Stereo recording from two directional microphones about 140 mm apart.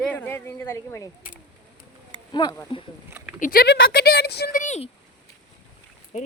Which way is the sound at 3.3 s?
80° left.